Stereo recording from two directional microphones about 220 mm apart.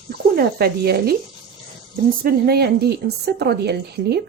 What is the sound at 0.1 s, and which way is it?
Speech, 45° right (ahead or behind).